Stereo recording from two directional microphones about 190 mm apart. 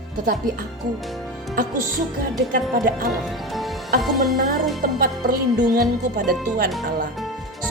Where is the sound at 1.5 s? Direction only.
45° right (ahead or behind).